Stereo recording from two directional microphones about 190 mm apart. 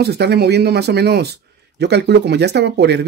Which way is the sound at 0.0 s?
60° right (ahead or behind).